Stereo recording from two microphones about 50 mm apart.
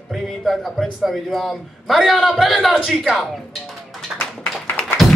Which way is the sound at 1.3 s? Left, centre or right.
Centre.